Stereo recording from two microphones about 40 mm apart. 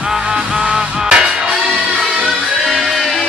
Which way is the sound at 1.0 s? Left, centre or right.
Centre.